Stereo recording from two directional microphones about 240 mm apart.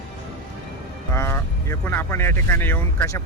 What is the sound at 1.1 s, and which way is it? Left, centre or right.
Speech, centre.